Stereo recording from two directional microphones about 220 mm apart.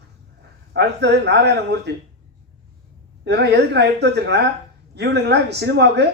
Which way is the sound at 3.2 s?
50° right (ahead or behind).